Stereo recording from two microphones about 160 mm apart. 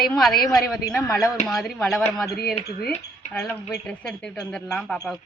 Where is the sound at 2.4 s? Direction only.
75° left (ahead or behind).